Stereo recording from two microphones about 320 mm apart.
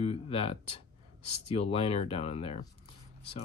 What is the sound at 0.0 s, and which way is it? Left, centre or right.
Speech, centre.